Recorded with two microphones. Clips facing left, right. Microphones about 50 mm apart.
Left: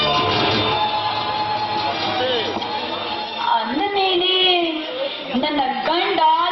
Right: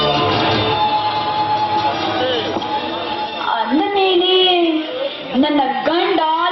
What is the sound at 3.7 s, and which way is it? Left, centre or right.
Child singing, centre.